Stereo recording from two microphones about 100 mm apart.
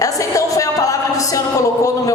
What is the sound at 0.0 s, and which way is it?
Speech, 35° left (ahead or behind).